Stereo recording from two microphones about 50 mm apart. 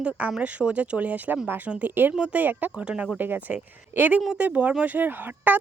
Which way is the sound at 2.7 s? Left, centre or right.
Right.